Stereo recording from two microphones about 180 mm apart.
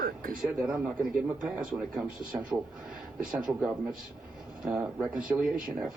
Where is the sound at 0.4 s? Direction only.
5° right (ahead or behind).